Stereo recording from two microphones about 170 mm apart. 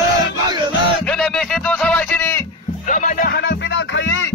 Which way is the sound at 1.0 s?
5° left (ahead or behind).